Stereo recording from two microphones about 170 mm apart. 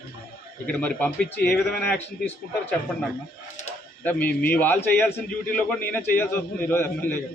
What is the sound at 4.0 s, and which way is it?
A man's voice, 10° left (ahead or behind).